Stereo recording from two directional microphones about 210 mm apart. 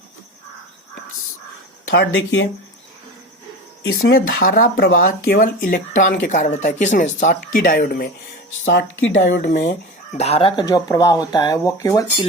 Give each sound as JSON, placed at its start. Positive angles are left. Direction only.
{"t": 2.1, "sound": "speech", "side_deg": 70}
{"t": 3.8, "sound": "speech", "side_deg": 45}
{"t": 8.6, "sound": "speech", "side_deg": 60}
{"t": 9.5, "sound": "speech", "side_deg": 40}